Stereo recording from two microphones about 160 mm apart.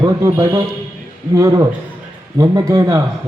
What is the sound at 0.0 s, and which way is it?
A man's voice, 20° right (ahead or behind).